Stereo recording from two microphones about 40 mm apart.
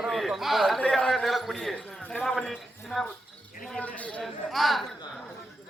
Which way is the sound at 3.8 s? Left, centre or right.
Left.